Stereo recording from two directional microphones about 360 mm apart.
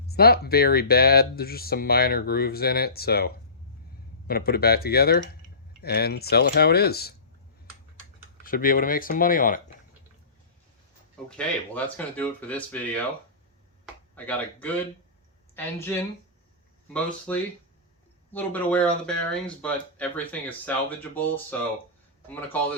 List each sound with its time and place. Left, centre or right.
0.1 s speech: left
8.4 s speech: left
11.3 s speech: centre
14.2 s speech: centre